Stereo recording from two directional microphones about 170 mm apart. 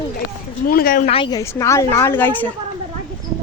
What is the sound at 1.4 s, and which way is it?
A woman's voice, 15° left (ahead or behind).